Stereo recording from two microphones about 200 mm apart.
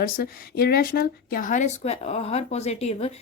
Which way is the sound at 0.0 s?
50° left (ahead or behind).